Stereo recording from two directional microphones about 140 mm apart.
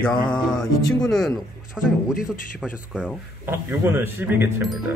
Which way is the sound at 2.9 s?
10° right (ahead or behind).